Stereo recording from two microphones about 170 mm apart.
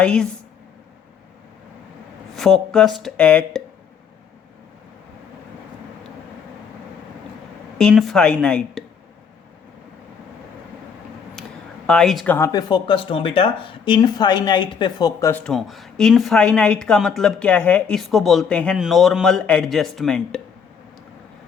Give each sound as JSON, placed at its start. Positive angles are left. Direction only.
{"t": 0.0, "sound": "speech", "side_deg": 5}
{"t": 2.3, "sound": "speech", "side_deg": 0}
{"t": 7.8, "sound": "speech", "side_deg": 0}
{"t": 11.9, "sound": "speech", "side_deg": 5}
{"t": 12.5, "sound": "speech", "side_deg": 25}